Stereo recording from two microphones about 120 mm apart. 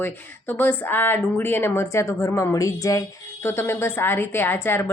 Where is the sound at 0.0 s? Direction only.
15° left (ahead or behind).